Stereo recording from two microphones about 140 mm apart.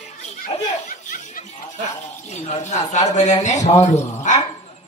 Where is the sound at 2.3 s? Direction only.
55° left (ahead or behind).